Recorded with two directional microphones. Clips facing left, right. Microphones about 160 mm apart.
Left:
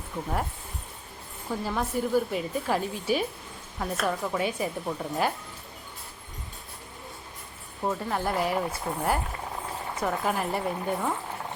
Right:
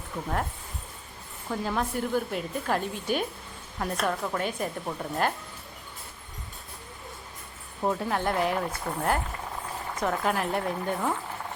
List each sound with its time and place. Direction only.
1.5 s a woman's voice: 5° left (ahead or behind)
7.9 s a woman's voice: centre (ahead or behind)